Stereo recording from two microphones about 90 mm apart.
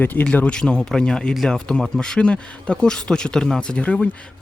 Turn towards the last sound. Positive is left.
turn(degrees=15)  # may be behind; listen again after turning